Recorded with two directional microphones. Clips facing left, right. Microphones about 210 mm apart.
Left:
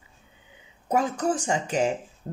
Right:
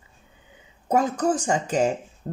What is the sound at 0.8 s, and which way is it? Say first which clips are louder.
Speech: right 3 dB; 40° right (ahead or behind).